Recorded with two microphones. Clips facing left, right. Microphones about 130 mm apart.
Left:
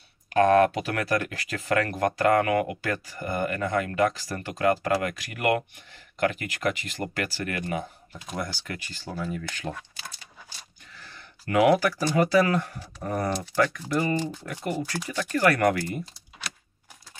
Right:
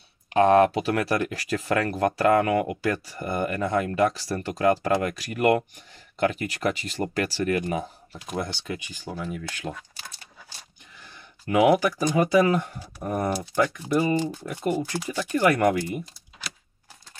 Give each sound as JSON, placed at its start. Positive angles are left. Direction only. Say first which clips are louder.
{"t": 0.3, "sound": "speech", "louder": "right 1 dB", "side_deg": -30}
{"t": 8.6, "sound": "speech", "louder": "right 3 dB", "side_deg": -15}
{"t": 11.0, "sound": "a sound", "louder": "left 1 dB", "side_deg": -20}
{"t": 12.2, "sound": "speech", "louder": "right 1 dB", "side_deg": -20}
{"t": 15.3, "sound": "speech", "louder": "right 1 dB", "side_deg": -15}